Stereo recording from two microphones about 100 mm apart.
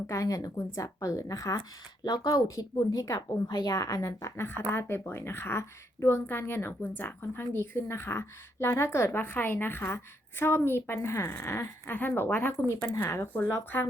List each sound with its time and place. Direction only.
0.1 s a woman's voice: 35° left (ahead or behind)